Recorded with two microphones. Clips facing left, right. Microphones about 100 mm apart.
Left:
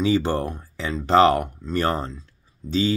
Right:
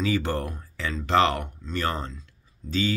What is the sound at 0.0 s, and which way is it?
Speech, 25° left (ahead or behind).